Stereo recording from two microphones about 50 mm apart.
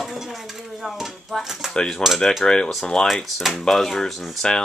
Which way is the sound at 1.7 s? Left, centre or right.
Centre.